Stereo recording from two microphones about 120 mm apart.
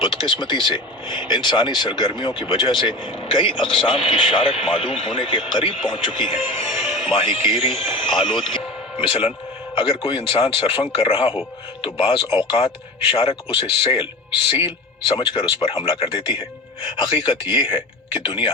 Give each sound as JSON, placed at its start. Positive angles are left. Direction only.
{"t": 0.0, "sound": "speech", "side_deg": 45}
{"t": 6.7, "sound": "speech", "side_deg": 0}
{"t": 7.0, "sound": "speech", "side_deg": 45}